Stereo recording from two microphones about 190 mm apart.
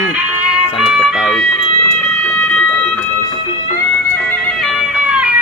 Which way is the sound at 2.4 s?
5° left (ahead or behind).